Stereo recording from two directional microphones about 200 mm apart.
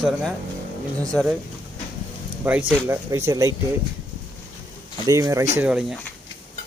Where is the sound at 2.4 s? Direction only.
5° right (ahead or behind).